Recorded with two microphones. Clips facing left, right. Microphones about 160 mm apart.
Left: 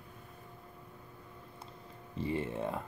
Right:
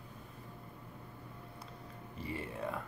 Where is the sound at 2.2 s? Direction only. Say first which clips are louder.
Left 5 dB; 25° left (ahead or behind).